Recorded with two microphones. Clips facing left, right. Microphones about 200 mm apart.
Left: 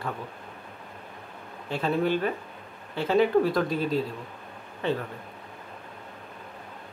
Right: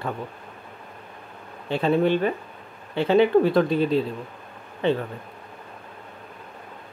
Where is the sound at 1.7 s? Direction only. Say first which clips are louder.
Right 5 dB; 25° right (ahead or behind).